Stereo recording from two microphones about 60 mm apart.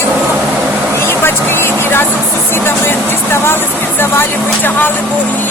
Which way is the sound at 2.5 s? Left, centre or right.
Left.